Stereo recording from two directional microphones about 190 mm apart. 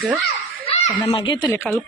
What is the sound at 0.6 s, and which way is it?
Speech, 30° left (ahead or behind).